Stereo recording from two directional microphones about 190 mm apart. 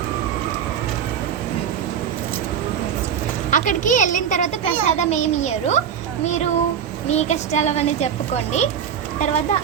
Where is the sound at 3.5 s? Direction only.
40° left (ahead or behind).